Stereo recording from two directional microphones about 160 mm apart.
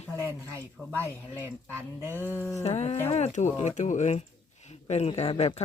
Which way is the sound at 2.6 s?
45° left (ahead or behind).